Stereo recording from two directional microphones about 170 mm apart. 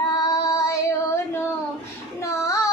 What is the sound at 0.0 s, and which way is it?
Child singing, 20° left (ahead or behind).